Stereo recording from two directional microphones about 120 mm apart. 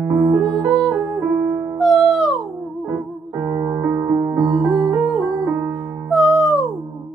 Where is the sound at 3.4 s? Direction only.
25° right (ahead or behind).